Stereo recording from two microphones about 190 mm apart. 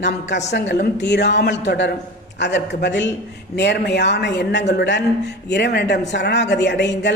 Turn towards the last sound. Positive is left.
turn(degrees=65)  # may be behind; listen again after turning